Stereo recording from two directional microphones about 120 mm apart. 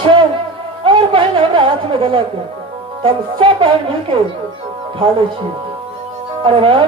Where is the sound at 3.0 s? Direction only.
45° right (ahead or behind).